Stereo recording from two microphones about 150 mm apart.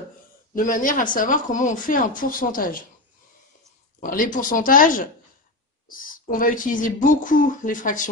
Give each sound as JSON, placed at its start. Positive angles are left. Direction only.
{"t": 0.6, "sound": "speech", "side_deg": 65}
{"t": 4.0, "sound": "speech", "side_deg": 65}